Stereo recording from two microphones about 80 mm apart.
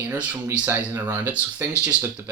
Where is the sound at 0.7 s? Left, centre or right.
Right.